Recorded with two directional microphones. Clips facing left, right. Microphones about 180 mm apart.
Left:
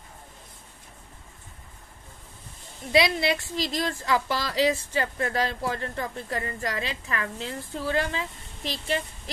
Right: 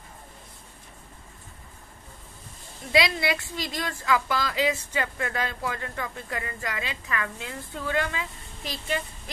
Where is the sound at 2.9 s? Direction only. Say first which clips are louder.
Left 2 dB; 25° left (ahead or behind).